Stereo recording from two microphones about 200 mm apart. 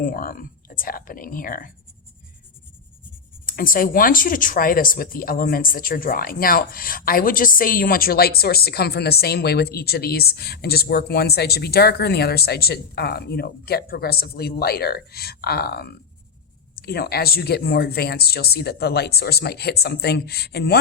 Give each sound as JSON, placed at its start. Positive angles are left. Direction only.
{"t": 0.0, "sound": "speech", "side_deg": 45}
{"t": 3.4, "sound": "speech", "side_deg": 45}